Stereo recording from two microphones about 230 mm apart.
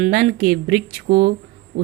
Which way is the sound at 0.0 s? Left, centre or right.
Right.